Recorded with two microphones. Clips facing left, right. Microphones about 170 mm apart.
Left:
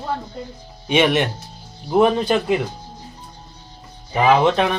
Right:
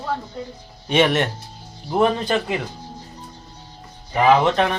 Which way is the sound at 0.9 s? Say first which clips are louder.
Left 1 dB; 10° left (ahead or behind).